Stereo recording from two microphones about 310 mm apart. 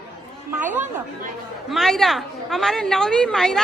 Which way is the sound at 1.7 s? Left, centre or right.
Centre.